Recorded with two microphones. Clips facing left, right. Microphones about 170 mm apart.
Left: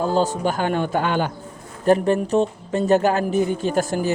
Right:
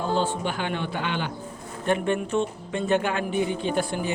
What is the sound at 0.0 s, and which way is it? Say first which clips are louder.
A man's voice: left 5 dB; 40° left (ahead or behind).